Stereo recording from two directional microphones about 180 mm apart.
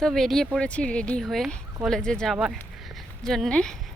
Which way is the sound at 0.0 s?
Centre (ahead or behind).